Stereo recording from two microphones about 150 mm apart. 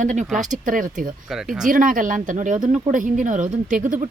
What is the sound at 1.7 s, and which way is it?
A woman's voice, 65° right (ahead or behind).